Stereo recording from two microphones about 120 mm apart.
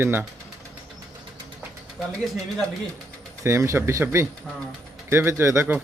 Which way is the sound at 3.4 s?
25° right (ahead or behind).